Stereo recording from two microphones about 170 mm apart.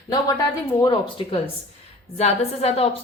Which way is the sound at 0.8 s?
30° left (ahead or behind).